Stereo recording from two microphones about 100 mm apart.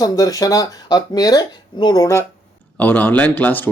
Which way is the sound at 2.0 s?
25° left (ahead or behind).